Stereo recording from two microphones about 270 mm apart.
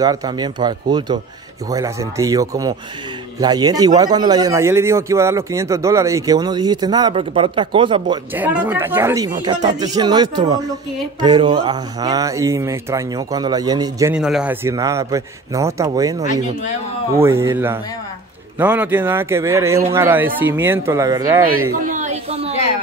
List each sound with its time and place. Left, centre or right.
0.0 s speech: centre
8.4 s speech: centre
21.8 s a sound: right